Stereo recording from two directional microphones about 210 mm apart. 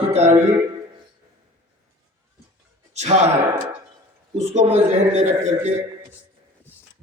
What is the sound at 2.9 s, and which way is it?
A man's voice, 30° right (ahead or behind).